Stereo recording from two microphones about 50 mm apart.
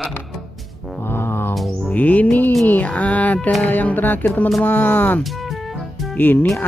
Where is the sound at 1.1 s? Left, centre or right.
Left.